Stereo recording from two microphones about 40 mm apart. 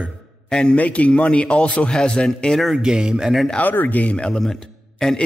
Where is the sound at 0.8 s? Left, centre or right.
Left.